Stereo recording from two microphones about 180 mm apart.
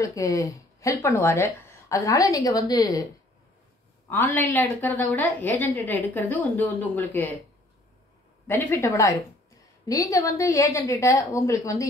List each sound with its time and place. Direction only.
0.0 s a woman's voice: 20° left (ahead or behind)
4.1 s a woman's voice: 10° left (ahead or behind)
8.5 s a woman's voice: 15° left (ahead or behind)